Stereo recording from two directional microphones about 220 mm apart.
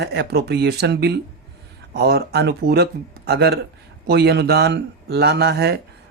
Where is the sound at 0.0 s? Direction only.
50° right (ahead or behind).